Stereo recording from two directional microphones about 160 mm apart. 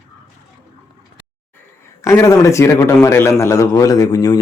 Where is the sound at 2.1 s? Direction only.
20° left (ahead or behind).